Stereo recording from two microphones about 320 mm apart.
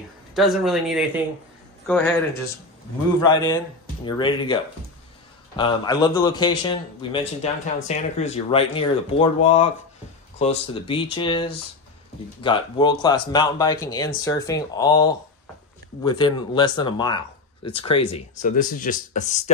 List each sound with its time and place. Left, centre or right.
0.3 s speech: centre
5.6 s speech: centre